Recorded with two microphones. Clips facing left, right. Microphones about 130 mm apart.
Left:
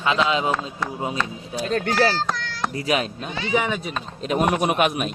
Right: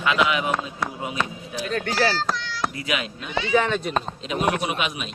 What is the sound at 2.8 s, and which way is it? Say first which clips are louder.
Speech: left 8 dB; 35° left (ahead or behind).